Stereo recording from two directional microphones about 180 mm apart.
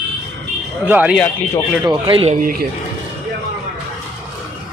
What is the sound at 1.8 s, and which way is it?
Speech, 25° right (ahead or behind).